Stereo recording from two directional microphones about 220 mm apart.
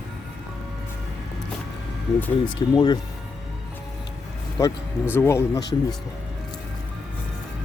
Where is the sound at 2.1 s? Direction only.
10° left (ahead or behind).